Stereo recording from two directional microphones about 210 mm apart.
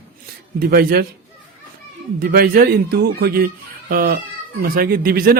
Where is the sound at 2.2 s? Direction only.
45° right (ahead or behind).